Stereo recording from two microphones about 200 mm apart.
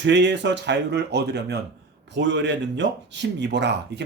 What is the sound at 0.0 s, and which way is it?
Speech, 60° right (ahead or behind).